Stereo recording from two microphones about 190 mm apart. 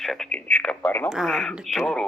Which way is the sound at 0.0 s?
5° left (ahead or behind).